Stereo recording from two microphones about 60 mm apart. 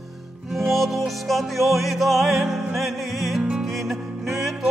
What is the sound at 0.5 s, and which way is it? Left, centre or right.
Music, centre.